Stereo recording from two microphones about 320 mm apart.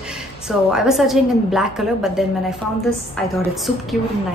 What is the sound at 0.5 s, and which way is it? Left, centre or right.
A woman's voice, centre.